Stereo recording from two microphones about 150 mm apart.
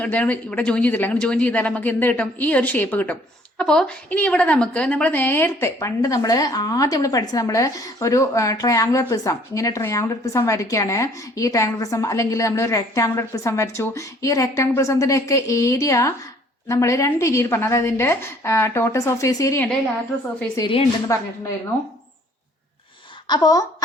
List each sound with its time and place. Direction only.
0.0 s a woman's voice: 10° left (ahead or behind)
21.1 s a woman's voice: 20° left (ahead or behind)
23.2 s a woman's voice: 25° left (ahead or behind)